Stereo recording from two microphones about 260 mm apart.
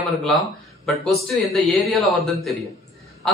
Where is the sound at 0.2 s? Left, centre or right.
Centre.